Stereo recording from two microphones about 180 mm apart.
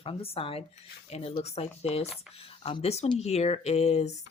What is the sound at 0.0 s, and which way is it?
Speech, 30° left (ahead or behind).